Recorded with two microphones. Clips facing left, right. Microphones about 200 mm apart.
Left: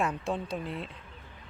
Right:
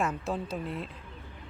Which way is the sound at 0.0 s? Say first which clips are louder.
Even; centre (ahead or behind).